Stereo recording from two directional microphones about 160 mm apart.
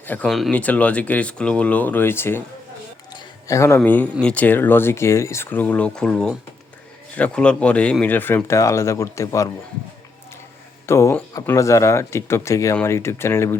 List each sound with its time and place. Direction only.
0.0 s speech: 10° left (ahead or behind)
0.3 s speech: centre (ahead or behind)
3.1 s a sound: 20° left (ahead or behind)
3.8 s speech: 10° left (ahead or behind)
10.8 s speech: 15° left (ahead or behind)